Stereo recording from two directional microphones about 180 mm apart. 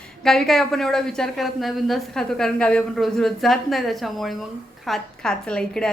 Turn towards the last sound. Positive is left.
turn(degrees=5)  # may be behind; listen again after turning